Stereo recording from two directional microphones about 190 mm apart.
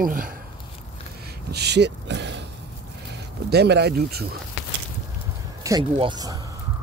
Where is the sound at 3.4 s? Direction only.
60° right (ahead or behind).